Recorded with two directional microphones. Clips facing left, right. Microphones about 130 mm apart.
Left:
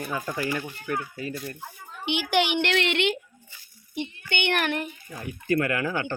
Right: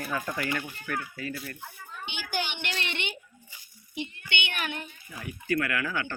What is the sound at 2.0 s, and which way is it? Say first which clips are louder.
A woman's voice: left 10 dB; 90° left.